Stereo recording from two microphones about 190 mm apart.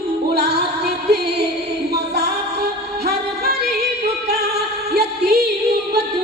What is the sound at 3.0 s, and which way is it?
Music, 55° right (ahead or behind).